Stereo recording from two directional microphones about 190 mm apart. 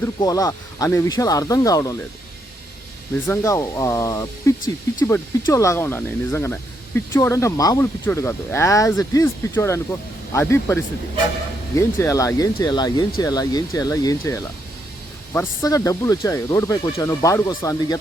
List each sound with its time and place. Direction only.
0.0 s speech: 20° left (ahead or behind)
3.2 s speech: 15° left (ahead or behind)
11.8 s speech: 15° left (ahead or behind)